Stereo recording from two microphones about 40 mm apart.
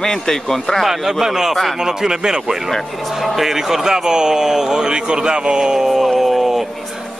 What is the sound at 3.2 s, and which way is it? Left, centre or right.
Speech, centre.